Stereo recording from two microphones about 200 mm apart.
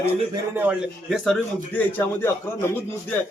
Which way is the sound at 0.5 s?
10° right (ahead or behind).